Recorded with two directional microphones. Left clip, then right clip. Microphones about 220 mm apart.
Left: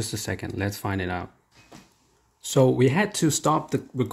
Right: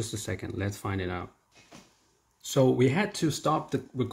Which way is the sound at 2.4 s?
20° left (ahead or behind).